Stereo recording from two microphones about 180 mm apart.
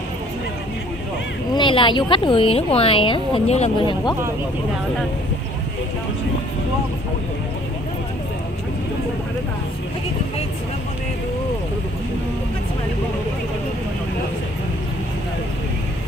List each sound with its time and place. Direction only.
1.5 s speech: 25° left (ahead or behind)